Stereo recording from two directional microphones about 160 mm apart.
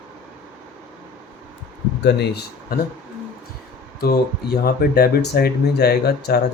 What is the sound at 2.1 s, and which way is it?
Speech, 90° left.